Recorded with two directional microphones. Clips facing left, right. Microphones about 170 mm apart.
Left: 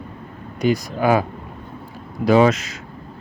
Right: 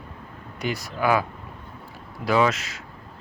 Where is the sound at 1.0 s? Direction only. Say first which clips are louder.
Left 3 dB; 40° left (ahead or behind).